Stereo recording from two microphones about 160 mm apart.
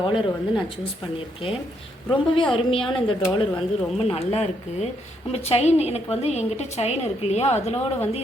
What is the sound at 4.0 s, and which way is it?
A woman's voice, 35° left (ahead or behind).